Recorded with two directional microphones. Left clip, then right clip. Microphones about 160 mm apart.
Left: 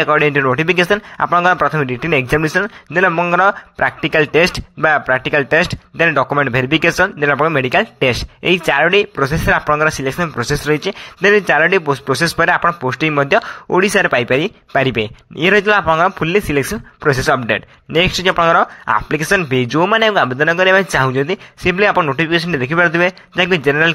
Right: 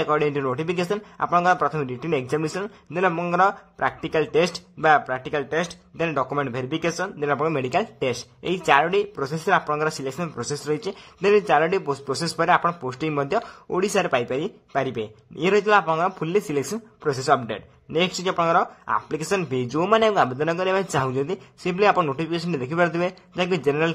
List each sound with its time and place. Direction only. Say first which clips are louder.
0.0 s speech: left 9 dB; 20° left (ahead or behind)
16.7 s speech: left 10 dB; 30° left (ahead or behind)